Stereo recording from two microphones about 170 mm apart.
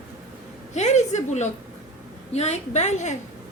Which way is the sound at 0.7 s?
45° left (ahead or behind).